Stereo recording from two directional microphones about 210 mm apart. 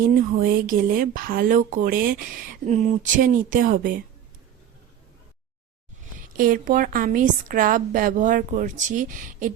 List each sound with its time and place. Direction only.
0.0 s speech: 40° right (ahead or behind)
6.1 s speech: 40° right (ahead or behind)